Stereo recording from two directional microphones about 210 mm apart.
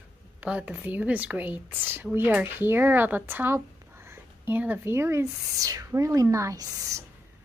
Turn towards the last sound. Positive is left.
turn(degrees=-15)  # may be behind; listen again after turning